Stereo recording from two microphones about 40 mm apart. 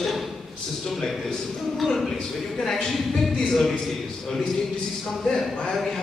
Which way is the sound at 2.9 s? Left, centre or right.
Centre.